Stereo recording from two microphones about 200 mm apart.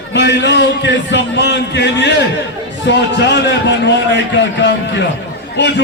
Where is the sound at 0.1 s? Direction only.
60° left (ahead or behind).